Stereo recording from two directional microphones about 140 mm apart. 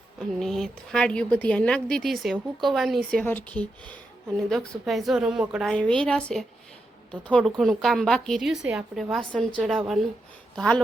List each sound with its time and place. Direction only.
0.2 s a woman's voice: centre (ahead or behind)
3.2 s speech: 10° left (ahead or behind)
4.9 s a woman's voice: centre (ahead or behind)
5.7 s a woman's voice: 10° left (ahead or behind)